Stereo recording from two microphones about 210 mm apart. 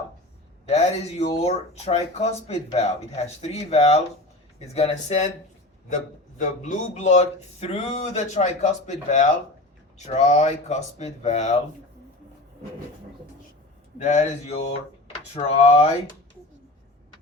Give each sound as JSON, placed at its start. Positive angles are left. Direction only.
{"t": 0.6, "sound": "speech", "side_deg": 30}
{"t": 6.4, "sound": "speech", "side_deg": 35}
{"t": 14.0, "sound": "speech", "side_deg": 35}